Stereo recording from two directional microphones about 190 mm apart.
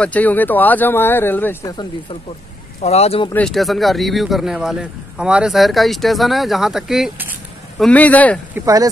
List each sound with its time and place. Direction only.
0.0 s speech: 10° left (ahead or behind)
2.8 s speech: 35° left (ahead or behind)
3.3 s a man's voice: centre (ahead or behind)
7.8 s speech: 10° left (ahead or behind)
8.5 s speech: 15° right (ahead or behind)